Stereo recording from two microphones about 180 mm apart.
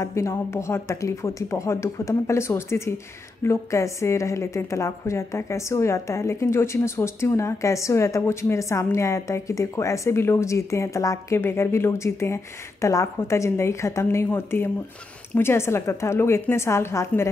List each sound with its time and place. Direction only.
0.0 s a woman's voice: 15° left (ahead or behind)